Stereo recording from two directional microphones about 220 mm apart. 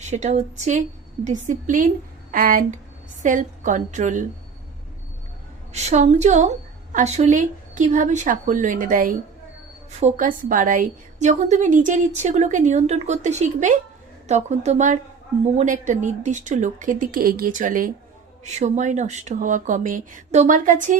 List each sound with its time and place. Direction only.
0.0 s a woman's voice: 30° right (ahead or behind)
5.7 s a woman's voice: 30° right (ahead or behind)